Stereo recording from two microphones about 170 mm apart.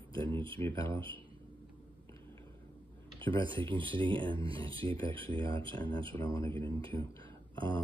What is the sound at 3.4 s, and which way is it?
Speech, 30° right (ahead or behind).